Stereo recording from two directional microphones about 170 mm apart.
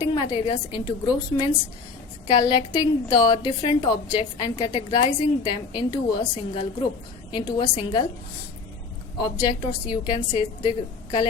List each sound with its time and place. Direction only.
0.0 s a woman's voice: 30° left (ahead or behind)
9.2 s a woman's voice: 30° left (ahead or behind)